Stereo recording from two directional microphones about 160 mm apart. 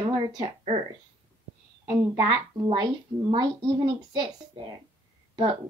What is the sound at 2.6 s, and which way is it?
A woman's voice, 25° right (ahead or behind).